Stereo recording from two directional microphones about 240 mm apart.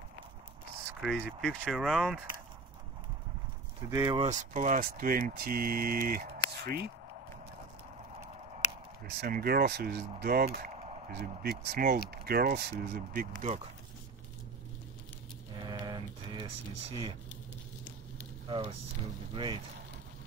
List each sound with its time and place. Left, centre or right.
1.0 s speech: centre
3.9 s speech: centre; by 6.9 s right
9.2 s speech: right
15.5 s a sound: centre
16.9 s speech: centre
19.3 s speech: centre